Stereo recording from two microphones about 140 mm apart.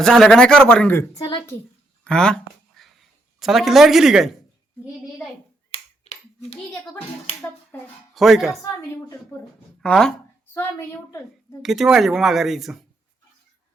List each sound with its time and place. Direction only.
0.0 s speech: 5° left (ahead or behind)
2.0 s a sound: 5° left (ahead or behind)
3.4 s speech: centre (ahead or behind)
5.7 s finger snapping: 45° left (ahead or behind)
8.1 s speech: centre (ahead or behind)
9.3 s speech: 20° left (ahead or behind)
9.8 s speech: 5° left (ahead or behind)
10.5 s a woman's voice: 20° left (ahead or behind)
11.6 s speech: 5° right (ahead or behind)